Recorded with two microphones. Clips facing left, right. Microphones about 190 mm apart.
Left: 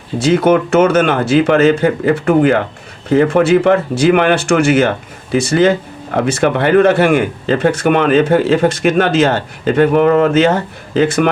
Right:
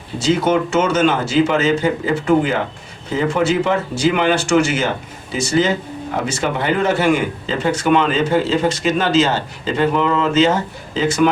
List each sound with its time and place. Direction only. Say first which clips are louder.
0.2 s speech: left 5 dB; 55° left (ahead or behind)